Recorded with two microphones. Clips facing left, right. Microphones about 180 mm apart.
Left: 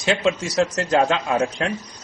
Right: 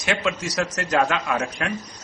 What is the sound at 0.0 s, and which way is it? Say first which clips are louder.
A man's voice: left 4 dB; 30° left (ahead or behind).